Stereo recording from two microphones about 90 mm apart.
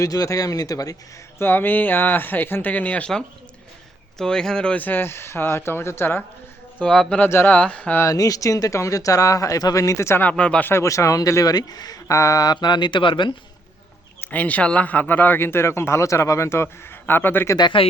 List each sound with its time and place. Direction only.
0.0 s speech: 40° left (ahead or behind)
1.4 s speech: 25° left (ahead or behind)
6.7 s speech: 10° left (ahead or behind)
7.2 s speech: 25° left (ahead or behind)
8.1 s speech: 40° left (ahead or behind)
10.2 s speech: 10° left (ahead or behind)
10.7 s speech: 30° left (ahead or behind); by 13.3 s 65° left (ahead or behind)
14.2 s speech: 20° left (ahead or behind)
17.6 s speech: 65° left (ahead or behind)